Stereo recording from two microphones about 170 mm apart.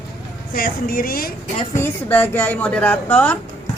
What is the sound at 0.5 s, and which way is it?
Speech, 55° left (ahead or behind).